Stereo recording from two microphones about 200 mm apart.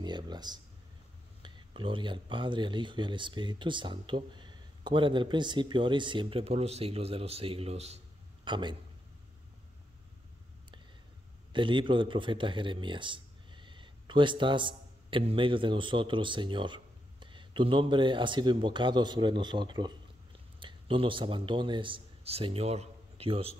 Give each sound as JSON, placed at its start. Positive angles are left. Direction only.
{"t": 0.0, "sound": "a sound", "side_deg": -20}
{"t": 1.4, "sound": "speech", "side_deg": -25}
{"t": 8.5, "sound": "speech", "side_deg": -20}
{"t": 11.5, "sound": "speech", "side_deg": -25}